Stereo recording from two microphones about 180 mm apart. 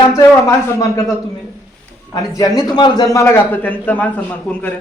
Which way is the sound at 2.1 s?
20° left (ahead or behind).